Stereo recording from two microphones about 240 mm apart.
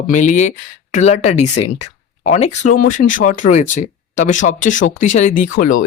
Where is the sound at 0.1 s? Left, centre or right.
Left.